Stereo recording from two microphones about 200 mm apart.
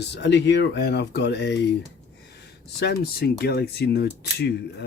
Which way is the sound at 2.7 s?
55° left (ahead or behind).